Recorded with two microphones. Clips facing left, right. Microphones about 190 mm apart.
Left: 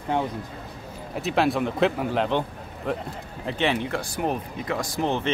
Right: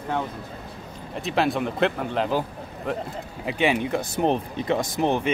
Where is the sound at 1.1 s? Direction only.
Centre (ahead or behind).